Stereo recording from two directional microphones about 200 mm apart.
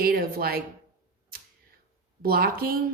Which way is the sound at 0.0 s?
50° right (ahead or behind).